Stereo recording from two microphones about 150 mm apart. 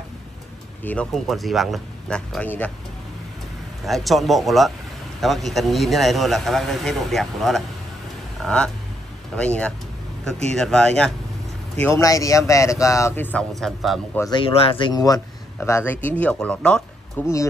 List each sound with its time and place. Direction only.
0.8 s a man's voice: 5° left (ahead or behind)
3.8 s a man's voice: centre (ahead or behind)
11.8 s speech: 20° left (ahead or behind); by 14.0 s centre (ahead or behind)
14.3 s speech: 35° left (ahead or behind); by 17.3 s 15° left (ahead or behind)